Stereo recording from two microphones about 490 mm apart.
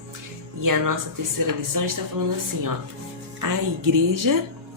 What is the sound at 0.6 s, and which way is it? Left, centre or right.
Speech, right.